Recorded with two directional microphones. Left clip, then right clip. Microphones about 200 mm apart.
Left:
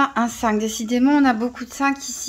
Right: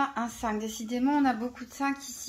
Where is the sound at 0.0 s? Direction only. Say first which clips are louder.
Left 10 dB; 45° left (ahead or behind).